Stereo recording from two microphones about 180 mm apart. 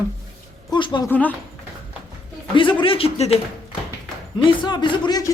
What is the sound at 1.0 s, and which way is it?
Speech, 10° left (ahead or behind).